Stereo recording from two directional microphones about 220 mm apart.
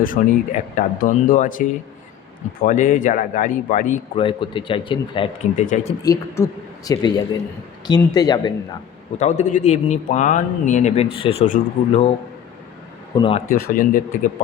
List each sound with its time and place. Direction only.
0.0 s speech: 35° left (ahead or behind)
6.0 s speech: 15° left (ahead or behind)
9.1 s speech: 30° left (ahead or behind)
13.1 s speech: 25° left (ahead or behind)
13.5 s speech: 40° left (ahead or behind)